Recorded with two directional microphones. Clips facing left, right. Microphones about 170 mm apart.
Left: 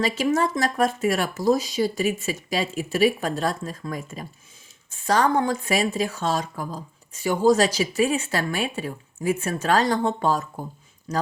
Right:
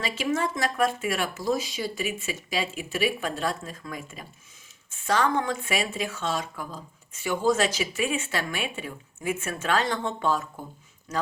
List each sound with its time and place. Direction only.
0.0 s a woman's voice: 40° left (ahead or behind)